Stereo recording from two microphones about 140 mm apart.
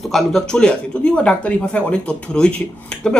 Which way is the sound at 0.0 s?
Centre (ahead or behind).